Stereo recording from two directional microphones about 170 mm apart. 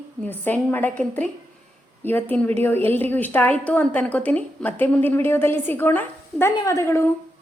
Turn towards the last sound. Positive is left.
turn(degrees=15)  # may be behind; listen again after turning